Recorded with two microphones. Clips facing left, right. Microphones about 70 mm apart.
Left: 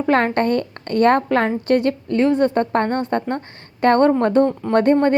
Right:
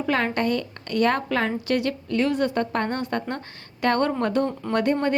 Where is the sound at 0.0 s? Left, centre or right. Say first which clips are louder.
Left 6 dB; left.